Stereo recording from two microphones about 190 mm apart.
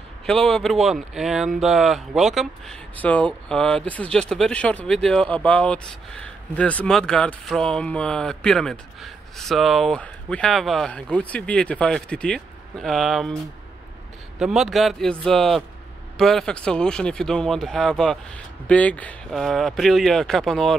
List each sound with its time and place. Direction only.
0.3 s speech: 5° left (ahead or behind)
14.4 s speech: centre (ahead or behind)